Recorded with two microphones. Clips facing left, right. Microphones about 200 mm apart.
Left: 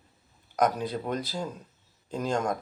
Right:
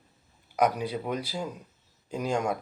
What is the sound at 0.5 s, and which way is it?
Speech, 10° right (ahead or behind).